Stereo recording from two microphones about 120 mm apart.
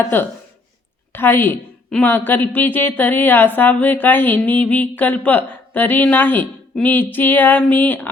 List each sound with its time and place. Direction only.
1.1 s a woman's voice: 20° left (ahead or behind)